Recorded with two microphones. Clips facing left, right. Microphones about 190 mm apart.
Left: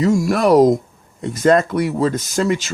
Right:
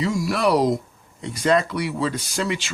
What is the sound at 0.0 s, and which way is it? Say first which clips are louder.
Speech: left 6 dB; 45° left (ahead or behind).